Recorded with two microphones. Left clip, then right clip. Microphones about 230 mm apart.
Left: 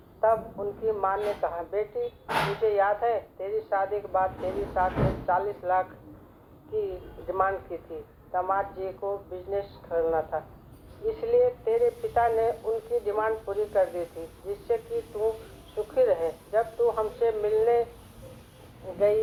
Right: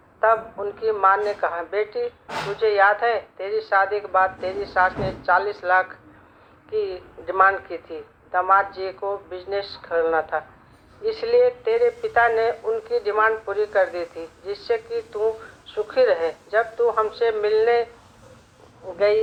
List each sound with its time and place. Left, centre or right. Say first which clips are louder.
0.2 s a man's voice: right 5 dB; right
9.0 s a woman's voice: right 4 dB; right
9.3 s a woman's voice: right 4 dB; right
18.9 s speech: right 4 dB; right